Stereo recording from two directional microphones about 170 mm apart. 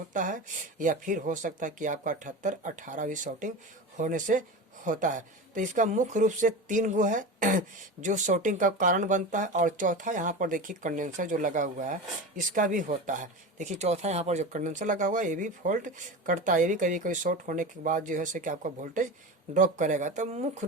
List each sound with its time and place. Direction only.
0.1 s speech: 50° right (ahead or behind)